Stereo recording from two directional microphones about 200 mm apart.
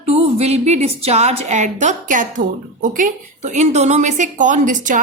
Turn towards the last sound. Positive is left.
turn(degrees=-40)  # may be behind; listen again after turning